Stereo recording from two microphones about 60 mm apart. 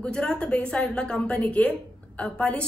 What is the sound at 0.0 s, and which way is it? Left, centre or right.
A woman's voice, centre.